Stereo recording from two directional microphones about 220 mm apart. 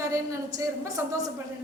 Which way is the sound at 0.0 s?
15° right (ahead or behind).